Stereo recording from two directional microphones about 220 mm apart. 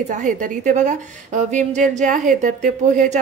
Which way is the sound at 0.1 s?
35° right (ahead or behind).